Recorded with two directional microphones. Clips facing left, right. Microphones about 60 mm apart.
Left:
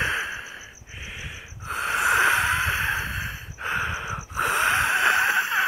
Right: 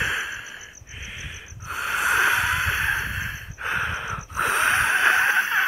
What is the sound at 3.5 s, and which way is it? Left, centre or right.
Gasp, centre.